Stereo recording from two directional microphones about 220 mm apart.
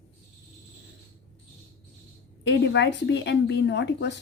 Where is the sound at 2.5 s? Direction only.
50° left (ahead or behind).